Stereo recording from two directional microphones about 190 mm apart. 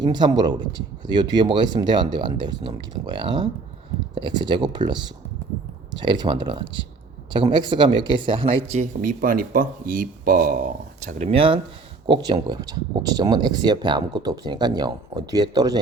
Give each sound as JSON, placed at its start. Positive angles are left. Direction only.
{"t": 0.0, "sound": "speech", "side_deg": -20}
{"t": 11.0, "sound": "speech", "side_deg": -35}